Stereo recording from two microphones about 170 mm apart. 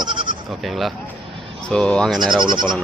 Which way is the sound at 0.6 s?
Centre (ahead or behind).